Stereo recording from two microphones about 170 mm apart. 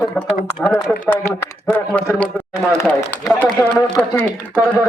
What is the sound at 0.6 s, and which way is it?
A man's voice, 10° left (ahead or behind).